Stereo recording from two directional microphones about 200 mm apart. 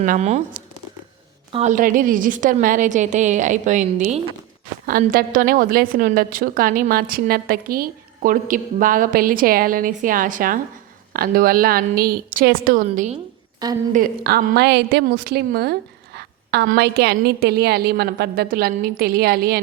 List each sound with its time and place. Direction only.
0.0 s a woman's voice: 35° right (ahead or behind)